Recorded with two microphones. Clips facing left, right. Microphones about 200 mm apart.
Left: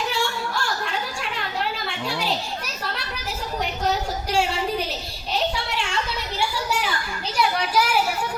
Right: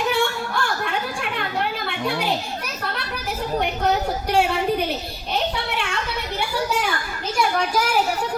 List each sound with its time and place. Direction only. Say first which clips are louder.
0.1 s a sound: right 4 dB; 55° right (ahead or behind)
4.3 s a woman's voice: right 3 dB; 55° right (ahead or behind)
7.3 s a child's voice: right 1 dB; 45° right (ahead or behind)